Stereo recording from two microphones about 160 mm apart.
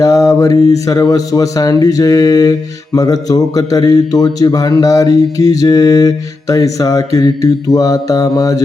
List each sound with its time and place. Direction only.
0.0 s speech: 20° left (ahead or behind)